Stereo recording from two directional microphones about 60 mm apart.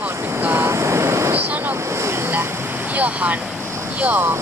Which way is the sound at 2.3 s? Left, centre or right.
Right.